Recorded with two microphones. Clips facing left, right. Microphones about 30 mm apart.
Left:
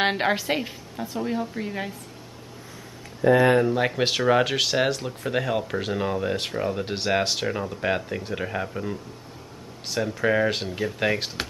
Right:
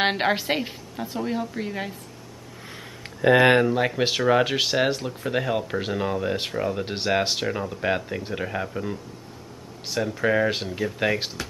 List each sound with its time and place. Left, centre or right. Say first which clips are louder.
0.0 s a woman's voice: even; centre
3.2 s speech: right 1 dB; right
3.6 s speech: even; centre